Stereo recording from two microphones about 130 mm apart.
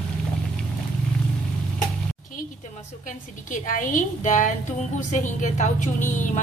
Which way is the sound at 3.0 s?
85° left.